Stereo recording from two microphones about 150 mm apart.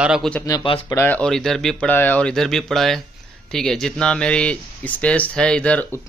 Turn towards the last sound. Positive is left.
turn(degrees=5)  # may be behind; listen again after turning